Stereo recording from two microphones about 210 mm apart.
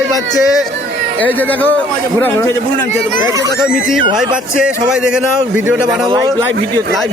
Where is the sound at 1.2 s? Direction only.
10° left (ahead or behind).